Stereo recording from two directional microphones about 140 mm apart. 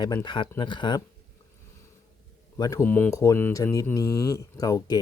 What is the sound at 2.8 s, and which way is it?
Speech, 15° left (ahead or behind).